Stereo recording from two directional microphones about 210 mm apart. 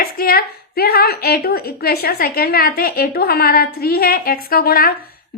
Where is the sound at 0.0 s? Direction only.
45° left (ahead or behind).